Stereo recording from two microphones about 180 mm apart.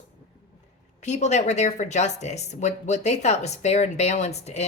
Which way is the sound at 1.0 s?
40° left (ahead or behind).